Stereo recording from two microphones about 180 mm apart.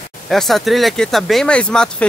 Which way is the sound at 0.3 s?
Centre (ahead or behind).